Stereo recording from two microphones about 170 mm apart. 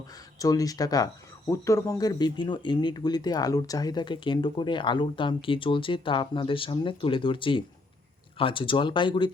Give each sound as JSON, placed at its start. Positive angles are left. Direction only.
{"t": 0.3, "sound": "speech", "side_deg": 20}